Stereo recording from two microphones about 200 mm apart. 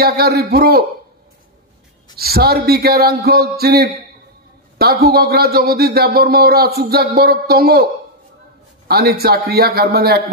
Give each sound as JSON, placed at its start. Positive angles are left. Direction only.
{"t": 0.0, "sound": "a man's voice", "side_deg": -50}
{"t": 2.1, "sound": "a man's voice", "side_deg": -50}